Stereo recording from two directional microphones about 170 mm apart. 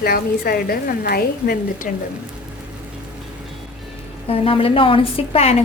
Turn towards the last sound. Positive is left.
turn(degrees=35)  # may be behind; listen again after turning